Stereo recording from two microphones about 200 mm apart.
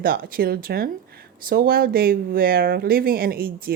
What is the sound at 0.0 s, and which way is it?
Speech, 45° right (ahead or behind).